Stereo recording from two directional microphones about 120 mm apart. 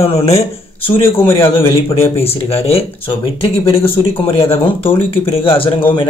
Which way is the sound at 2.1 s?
55° left (ahead or behind).